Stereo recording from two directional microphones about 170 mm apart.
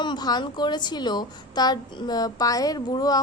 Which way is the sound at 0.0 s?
25° left (ahead or behind).